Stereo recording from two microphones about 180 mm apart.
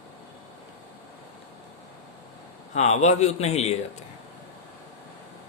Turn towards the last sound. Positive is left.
turn(degrees=35)  # may be behind; listen again after turning